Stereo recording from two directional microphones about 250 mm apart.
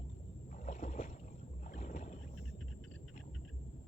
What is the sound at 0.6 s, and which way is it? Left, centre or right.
Boat, left.